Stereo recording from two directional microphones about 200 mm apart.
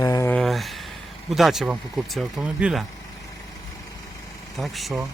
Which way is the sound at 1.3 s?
Centre (ahead or behind).